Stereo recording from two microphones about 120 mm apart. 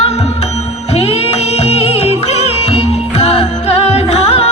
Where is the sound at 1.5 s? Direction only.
60° left (ahead or behind).